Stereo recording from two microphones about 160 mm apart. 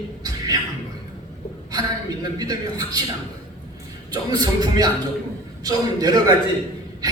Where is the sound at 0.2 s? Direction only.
25° right (ahead or behind).